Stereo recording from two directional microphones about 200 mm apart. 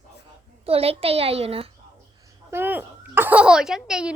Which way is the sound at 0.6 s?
30° right (ahead or behind).